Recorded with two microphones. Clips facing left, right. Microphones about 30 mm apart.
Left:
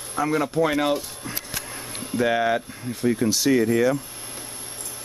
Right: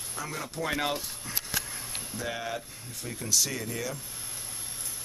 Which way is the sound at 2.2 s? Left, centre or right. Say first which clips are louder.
Left 14 dB; left.